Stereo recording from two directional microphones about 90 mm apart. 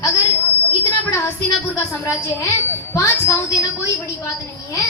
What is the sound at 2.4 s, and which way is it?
A woman's voice, 35° left (ahead or behind).